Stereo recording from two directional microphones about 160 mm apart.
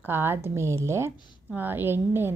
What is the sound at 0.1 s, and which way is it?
A woman's voice, 15° right (ahead or behind).